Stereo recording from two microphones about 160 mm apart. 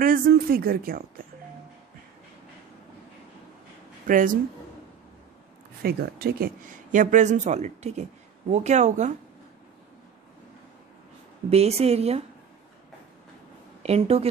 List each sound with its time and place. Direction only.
0.0 s a woman's voice: 65° right (ahead or behind)
4.1 s a woman's voice: 55° right (ahead or behind)
5.8 s speech: 75° right (ahead or behind); by 9.1 s 45° right (ahead or behind)
11.5 s speech: 40° right (ahead or behind)
13.8 s speech: 40° right (ahead or behind)